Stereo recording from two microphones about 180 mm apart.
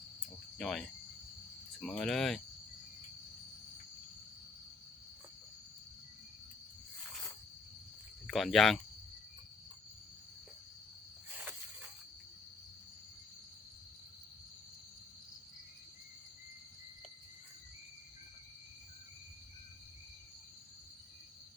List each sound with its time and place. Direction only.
0.6 s speech: 5° left (ahead or behind)
8.3 s speech: centre (ahead or behind)